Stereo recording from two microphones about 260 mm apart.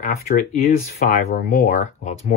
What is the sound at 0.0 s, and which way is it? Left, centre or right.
Speech, left.